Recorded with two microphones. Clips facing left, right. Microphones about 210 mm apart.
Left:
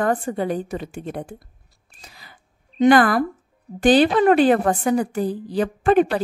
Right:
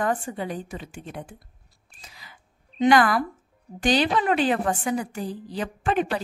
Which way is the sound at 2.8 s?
55° left (ahead or behind).